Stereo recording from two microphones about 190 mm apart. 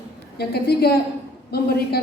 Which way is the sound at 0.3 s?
55° left (ahead or behind).